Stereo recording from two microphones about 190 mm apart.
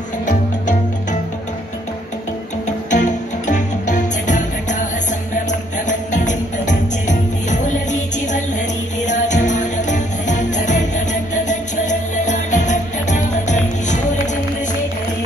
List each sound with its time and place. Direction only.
2.9 s music: 40° left (ahead or behind)
5.9 s music: 40° left (ahead or behind)